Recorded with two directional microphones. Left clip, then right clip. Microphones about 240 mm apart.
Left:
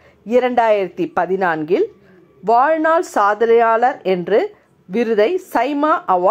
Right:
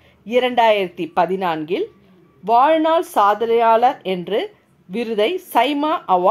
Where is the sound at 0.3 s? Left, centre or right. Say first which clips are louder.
Left 1 dB; centre.